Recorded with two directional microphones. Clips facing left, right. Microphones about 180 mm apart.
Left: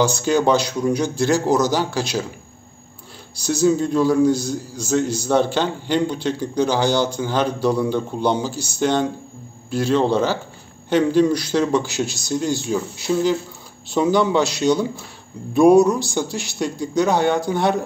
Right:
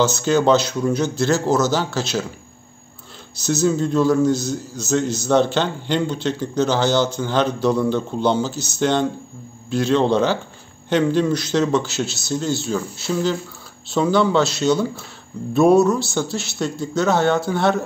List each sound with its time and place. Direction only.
0.0 s a man's voice: 10° left (ahead or behind)
3.3 s a man's voice: 10° left (ahead or behind)